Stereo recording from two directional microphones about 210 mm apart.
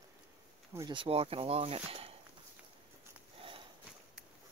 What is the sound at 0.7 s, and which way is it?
Speech, 20° right (ahead or behind).